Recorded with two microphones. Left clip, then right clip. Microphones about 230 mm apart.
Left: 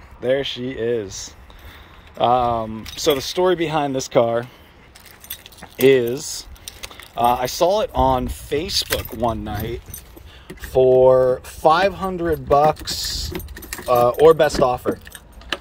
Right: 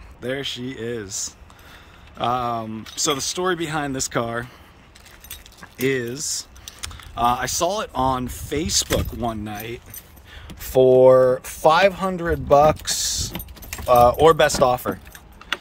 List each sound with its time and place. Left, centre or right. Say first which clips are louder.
0.2 s speech: left 7 dB; centre
5.6 s speech: left 9 dB; centre
11.1 s speech: right 1 dB; right
11.4 s speech: even; centre